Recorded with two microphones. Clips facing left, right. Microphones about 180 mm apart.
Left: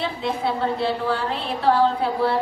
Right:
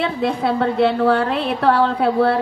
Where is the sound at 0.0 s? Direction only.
60° right (ahead or behind).